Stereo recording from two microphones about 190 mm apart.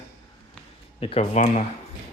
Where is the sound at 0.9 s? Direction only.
30° left (ahead or behind).